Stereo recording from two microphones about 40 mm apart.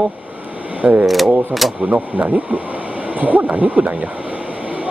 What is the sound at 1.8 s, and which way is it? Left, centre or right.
Speech, right.